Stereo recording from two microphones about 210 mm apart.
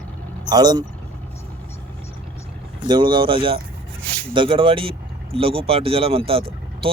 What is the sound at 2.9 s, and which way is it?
Speech, 20° right (ahead or behind).